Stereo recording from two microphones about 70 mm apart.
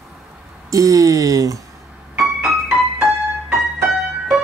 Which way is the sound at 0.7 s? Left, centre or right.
Right.